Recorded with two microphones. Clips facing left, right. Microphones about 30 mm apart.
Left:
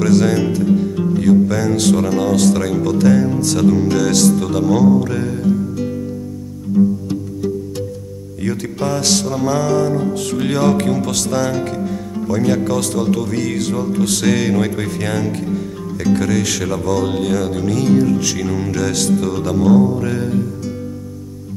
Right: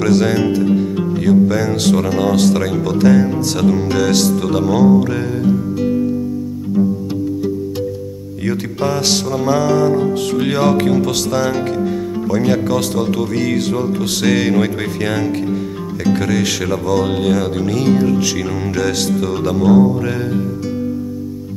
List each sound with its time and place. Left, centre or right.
0.0 s music: centre
8.5 s music: centre